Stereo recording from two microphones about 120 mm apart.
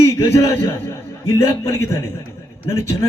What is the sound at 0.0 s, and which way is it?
A man's voice, 25° left (ahead or behind).